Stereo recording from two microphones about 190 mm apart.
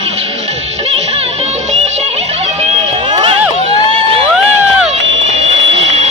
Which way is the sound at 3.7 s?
30° right (ahead or behind).